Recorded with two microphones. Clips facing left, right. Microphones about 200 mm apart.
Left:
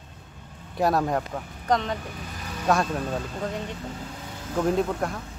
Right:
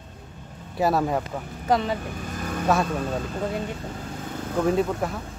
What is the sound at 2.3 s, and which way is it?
Vehicle, 50° right (ahead or behind).